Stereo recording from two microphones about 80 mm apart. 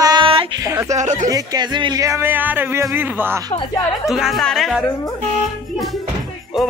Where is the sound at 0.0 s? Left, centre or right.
Right.